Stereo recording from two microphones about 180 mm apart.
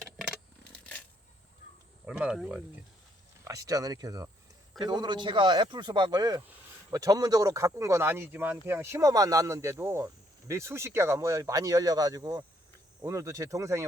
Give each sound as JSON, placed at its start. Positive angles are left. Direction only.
{"t": 2.0, "sound": "speech", "side_deg": -5}
{"t": 3.4, "sound": "speech", "side_deg": -20}